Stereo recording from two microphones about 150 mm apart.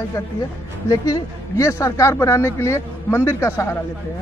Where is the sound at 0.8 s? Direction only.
20° left (ahead or behind).